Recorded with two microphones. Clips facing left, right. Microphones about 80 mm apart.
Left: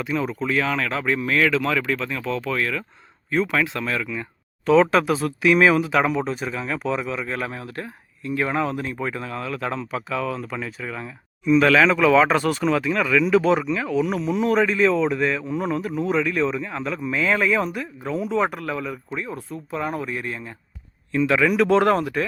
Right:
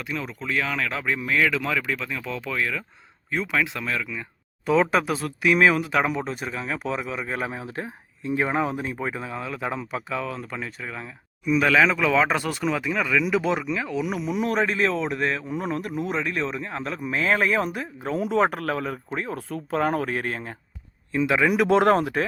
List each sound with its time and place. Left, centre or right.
0.0 s speech: centre
18.1 s speech: right
19.5 s speech: right
21.1 s speech: centre; by 22.2 s right